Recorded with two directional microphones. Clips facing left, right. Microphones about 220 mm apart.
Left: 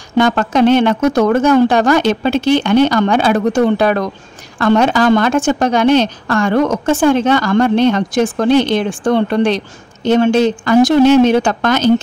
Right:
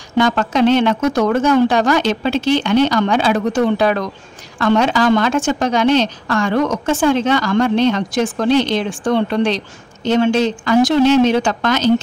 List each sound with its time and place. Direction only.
0.2 s a woman's voice: 50° left (ahead or behind)